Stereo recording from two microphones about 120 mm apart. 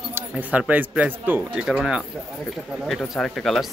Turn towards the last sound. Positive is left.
turn(degrees=5)  # may be behind; listen again after turning